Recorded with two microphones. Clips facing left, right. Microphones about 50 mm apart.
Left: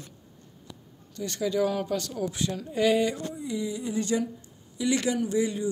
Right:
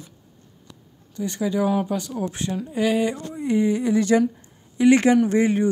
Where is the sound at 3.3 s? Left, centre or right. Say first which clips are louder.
Right 10 dB; right.